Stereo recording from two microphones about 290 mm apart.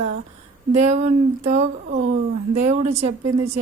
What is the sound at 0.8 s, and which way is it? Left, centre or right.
Speech, right.